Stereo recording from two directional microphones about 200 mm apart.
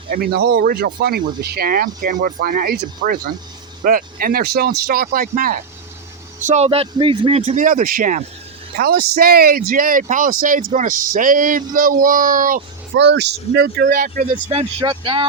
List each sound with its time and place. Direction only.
0.1 s speech: 50° right (ahead or behind)
6.4 s a man's voice: 35° right (ahead or behind)
12.9 s speech: 60° right (ahead or behind); by 15.3 s 25° right (ahead or behind)